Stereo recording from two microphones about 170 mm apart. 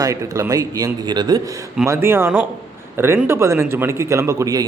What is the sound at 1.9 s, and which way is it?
A man's voice, 15° right (ahead or behind).